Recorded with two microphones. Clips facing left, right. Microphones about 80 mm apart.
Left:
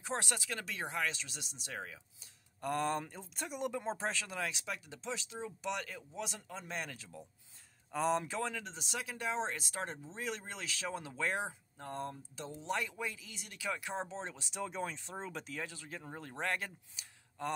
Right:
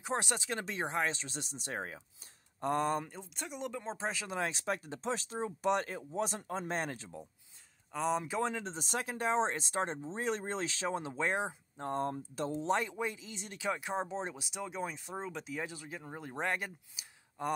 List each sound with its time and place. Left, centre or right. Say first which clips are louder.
0.0 s speech: right 3 dB; right
2.6 s speech: right 3 dB; right
3.1 s speech: even; centre
4.1 s speech: right 2 dB; centre
4.4 s speech: right 5 dB; right
7.9 s speech: even; centre
8.3 s speech: right 4 dB; right